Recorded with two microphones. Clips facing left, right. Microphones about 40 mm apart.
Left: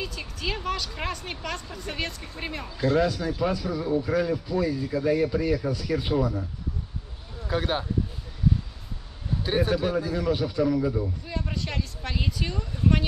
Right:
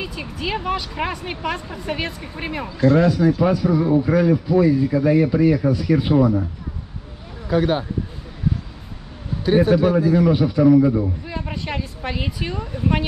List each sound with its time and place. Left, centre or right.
0.0 s a man's voice: centre
7.4 s speech: centre
9.6 s a man's voice: centre